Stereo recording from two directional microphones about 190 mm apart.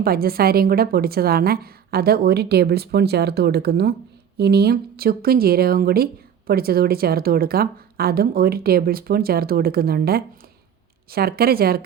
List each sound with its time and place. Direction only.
0.0 s a woman's voice: 50° right (ahead or behind)